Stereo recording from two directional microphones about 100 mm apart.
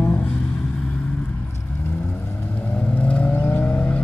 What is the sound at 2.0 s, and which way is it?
Vehicle, 15° left (ahead or behind).